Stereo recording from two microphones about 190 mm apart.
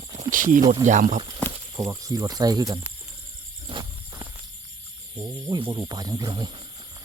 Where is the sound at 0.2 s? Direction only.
45° right (ahead or behind).